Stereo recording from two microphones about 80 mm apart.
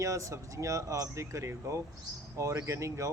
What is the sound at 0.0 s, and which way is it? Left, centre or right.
A man's voice, right.